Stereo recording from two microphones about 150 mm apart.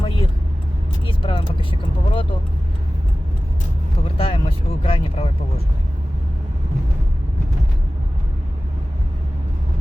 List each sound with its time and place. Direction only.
0.0 s vehicle: 35° left (ahead or behind)
1.0 s speech: 35° left (ahead or behind)
4.2 s speech: 35° left (ahead or behind)